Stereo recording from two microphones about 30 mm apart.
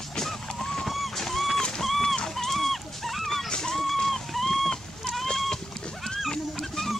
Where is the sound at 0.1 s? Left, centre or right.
Centre.